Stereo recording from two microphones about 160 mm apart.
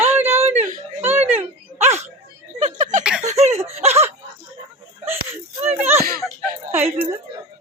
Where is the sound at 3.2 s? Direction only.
45° right (ahead or behind).